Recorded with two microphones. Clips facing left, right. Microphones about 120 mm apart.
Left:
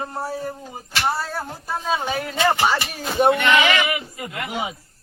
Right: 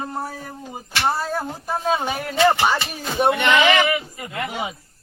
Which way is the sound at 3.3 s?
25° right (ahead or behind).